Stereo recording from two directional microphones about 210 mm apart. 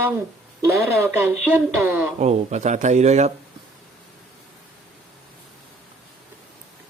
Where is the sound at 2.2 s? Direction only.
30° right (ahead or behind).